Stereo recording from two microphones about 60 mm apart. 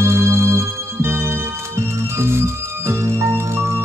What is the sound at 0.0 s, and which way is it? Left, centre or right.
Music, right.